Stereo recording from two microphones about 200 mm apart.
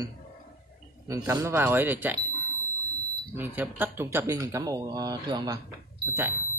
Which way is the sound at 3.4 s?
10° right (ahead or behind).